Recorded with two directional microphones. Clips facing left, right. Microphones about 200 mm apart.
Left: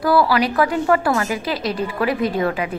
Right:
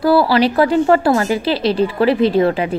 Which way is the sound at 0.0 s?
30° right (ahead or behind).